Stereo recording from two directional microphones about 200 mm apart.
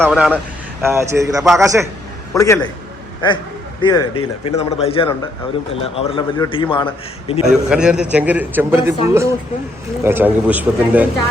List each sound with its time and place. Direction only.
0.0 s a man's voice: 5° right (ahead or behind)
2.3 s a man's voice: 15° left (ahead or behind)
3.8 s a man's voice: 25° left (ahead or behind)
7.4 s a man's voice: 5° right (ahead or behind)